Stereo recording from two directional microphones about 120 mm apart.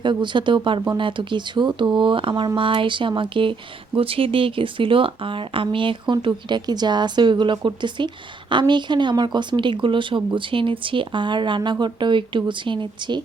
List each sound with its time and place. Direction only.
0.0 s speech: 40° right (ahead or behind)